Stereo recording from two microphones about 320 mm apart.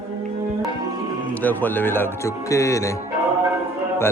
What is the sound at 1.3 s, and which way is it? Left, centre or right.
Speech, centre.